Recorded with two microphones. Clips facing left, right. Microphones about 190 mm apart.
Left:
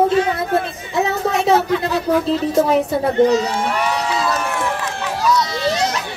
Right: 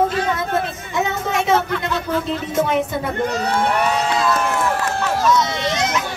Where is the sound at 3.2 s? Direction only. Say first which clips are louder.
Left 4 dB; 55° right (ahead or behind).